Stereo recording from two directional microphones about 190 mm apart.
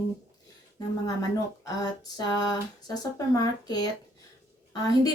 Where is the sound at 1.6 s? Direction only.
20° left (ahead or behind).